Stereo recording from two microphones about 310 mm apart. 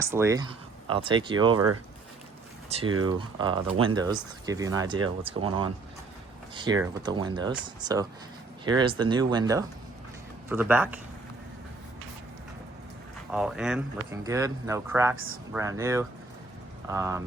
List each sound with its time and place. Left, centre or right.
0.0 s speech: centre
2.6 s speech: centre
7.0 s speech: centre
13.3 s speech: centre